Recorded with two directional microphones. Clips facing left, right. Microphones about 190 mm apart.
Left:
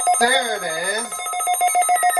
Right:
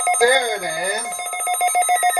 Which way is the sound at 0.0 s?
10° right (ahead or behind).